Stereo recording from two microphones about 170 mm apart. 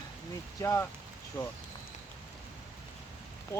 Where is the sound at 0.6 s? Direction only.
15° left (ahead or behind).